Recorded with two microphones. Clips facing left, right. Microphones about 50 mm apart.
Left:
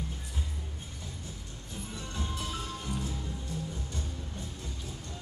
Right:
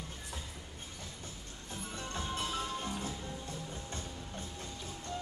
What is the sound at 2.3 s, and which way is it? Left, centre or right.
Music, right.